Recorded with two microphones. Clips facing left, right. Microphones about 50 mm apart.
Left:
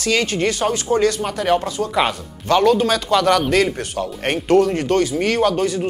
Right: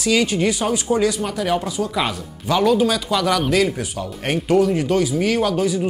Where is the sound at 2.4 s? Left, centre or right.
Centre.